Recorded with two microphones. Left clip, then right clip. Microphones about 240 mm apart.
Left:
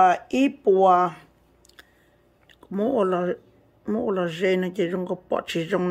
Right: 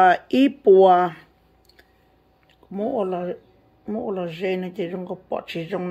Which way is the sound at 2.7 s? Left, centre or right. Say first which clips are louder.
Left 2 dB; centre.